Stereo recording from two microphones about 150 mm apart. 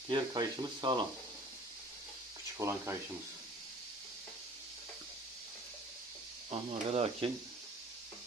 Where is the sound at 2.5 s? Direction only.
20° right (ahead or behind).